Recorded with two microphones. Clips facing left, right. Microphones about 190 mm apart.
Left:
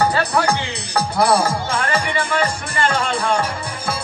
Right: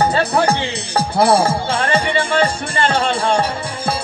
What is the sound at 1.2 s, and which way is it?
Speech, 30° right (ahead or behind).